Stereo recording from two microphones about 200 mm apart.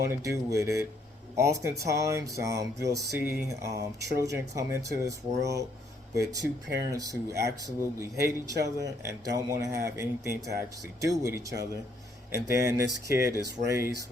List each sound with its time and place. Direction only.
0.1 s speech: 15° right (ahead or behind)